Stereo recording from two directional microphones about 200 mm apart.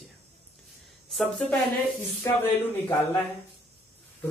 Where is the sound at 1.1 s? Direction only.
5° left (ahead or behind).